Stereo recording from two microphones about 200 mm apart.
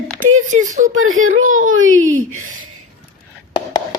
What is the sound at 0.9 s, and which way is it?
Speech, 90° right.